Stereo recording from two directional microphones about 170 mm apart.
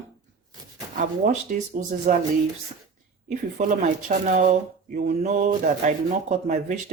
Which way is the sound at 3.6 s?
45° right (ahead or behind).